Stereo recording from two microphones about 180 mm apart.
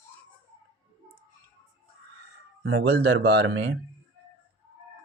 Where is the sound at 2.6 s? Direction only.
85° right.